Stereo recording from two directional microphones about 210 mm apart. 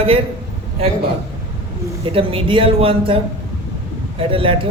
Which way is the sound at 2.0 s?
25° right (ahead or behind).